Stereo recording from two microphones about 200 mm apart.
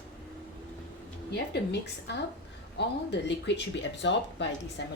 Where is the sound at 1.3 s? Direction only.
60° left (ahead or behind).